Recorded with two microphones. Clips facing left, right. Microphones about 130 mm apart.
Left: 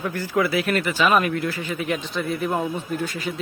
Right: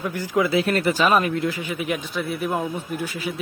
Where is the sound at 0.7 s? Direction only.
40° right (ahead or behind).